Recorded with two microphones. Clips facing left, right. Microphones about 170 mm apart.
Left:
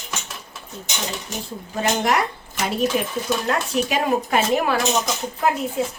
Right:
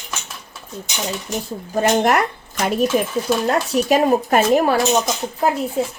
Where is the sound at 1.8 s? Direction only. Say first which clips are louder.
Right 5 dB; 50° right (ahead or behind).